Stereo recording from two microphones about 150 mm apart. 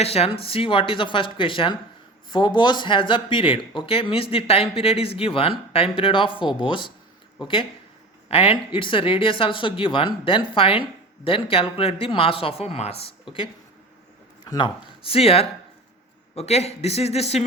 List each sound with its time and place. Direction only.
0.0 s speech: 45° left (ahead or behind)
14.4 s a man's voice: 30° left (ahead or behind); by 17.4 s 45° left (ahead or behind)